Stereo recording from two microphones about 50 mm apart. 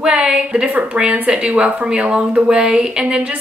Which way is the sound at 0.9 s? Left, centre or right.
Right.